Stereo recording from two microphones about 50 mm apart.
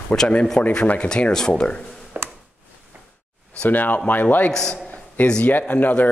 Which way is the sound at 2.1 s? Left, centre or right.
Right.